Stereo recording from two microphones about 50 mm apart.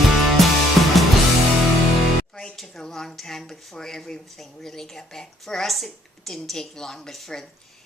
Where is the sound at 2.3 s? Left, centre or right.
Centre.